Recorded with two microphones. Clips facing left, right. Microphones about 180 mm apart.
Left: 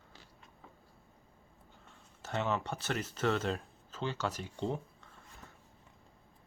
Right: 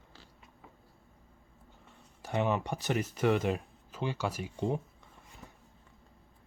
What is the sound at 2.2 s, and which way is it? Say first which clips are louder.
Speech: right 4 dB; 15° right (ahead or behind).